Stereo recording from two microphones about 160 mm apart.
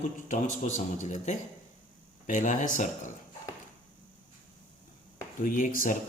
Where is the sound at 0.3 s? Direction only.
50° left (ahead or behind).